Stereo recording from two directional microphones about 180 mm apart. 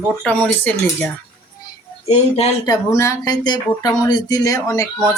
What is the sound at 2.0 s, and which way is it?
Speech, 35° left (ahead or behind).